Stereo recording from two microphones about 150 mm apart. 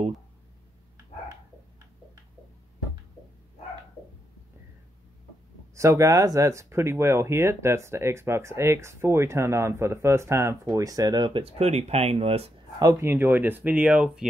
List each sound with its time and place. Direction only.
5.8 s speech: 20° right (ahead or behind); by 12.4 s 40° right (ahead or behind)
12.7 s speech: 20° right (ahead or behind); by 14.2 s 5° right (ahead or behind)